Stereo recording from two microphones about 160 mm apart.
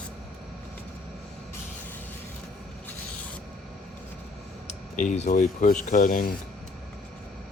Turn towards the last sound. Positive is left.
turn(degrees=65)  # may be behind; listen again after turning